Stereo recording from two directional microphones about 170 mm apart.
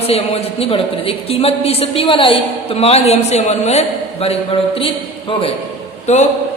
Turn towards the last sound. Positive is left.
turn(degrees=40)  # may be behind; listen again after turning